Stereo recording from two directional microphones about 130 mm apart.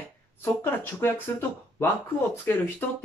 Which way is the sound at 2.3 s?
20° left (ahead or behind).